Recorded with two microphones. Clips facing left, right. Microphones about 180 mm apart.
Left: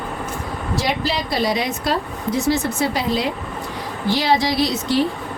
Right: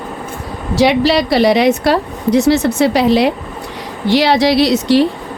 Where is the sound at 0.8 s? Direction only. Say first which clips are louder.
Right 12 dB; 75° right (ahead or behind).